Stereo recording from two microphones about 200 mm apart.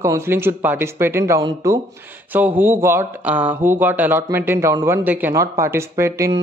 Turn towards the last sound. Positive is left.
turn(degrees=-15)  # may be behind; listen again after turning